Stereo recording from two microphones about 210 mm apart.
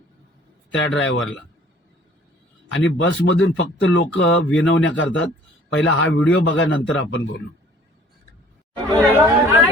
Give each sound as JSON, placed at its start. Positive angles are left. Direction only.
{"t": 0.7, "sound": "speech", "side_deg": 65}
{"t": 2.7, "sound": "speech", "side_deg": 60}
{"t": 8.9, "sound": "speech", "side_deg": -10}